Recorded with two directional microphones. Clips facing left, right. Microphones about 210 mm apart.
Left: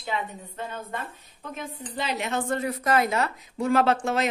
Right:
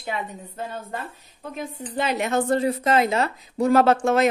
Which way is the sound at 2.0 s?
50° right (ahead or behind).